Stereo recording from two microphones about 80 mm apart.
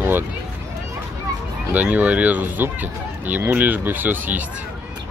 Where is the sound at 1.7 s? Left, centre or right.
Centre.